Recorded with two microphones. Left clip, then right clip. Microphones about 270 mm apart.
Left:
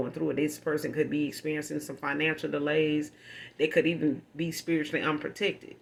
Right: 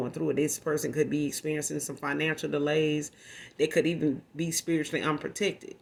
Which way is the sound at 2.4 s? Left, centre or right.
Right.